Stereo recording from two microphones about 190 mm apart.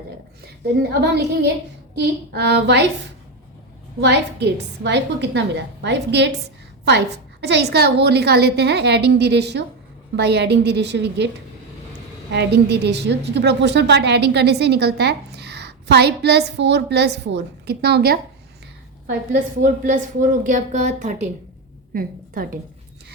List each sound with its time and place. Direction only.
0.8 s a woman's voice: 60° right (ahead or behind)
4.0 s a woman's voice: 65° right (ahead or behind)
12.3 s a woman's voice: 60° right (ahead or behind)
19.6 s a woman's voice: 45° right (ahead or behind)